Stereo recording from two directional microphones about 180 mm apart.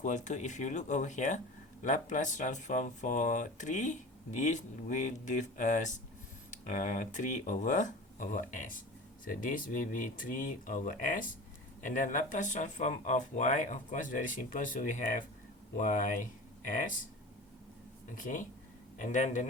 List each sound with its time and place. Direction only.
0.0 s speech: 40° left (ahead or behind)
18.1 s speech: 45° left (ahead or behind)